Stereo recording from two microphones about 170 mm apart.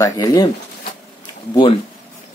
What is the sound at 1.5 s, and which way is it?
Speech, 30° left (ahead or behind).